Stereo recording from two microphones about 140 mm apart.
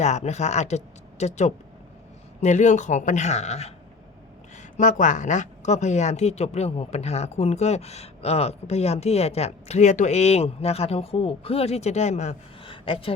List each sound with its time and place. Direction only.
0.0 s a woman's voice: 55° left (ahead or behind)
4.5 s a woman's voice: 65° left (ahead or behind)
12.7 s speech: 40° left (ahead or behind)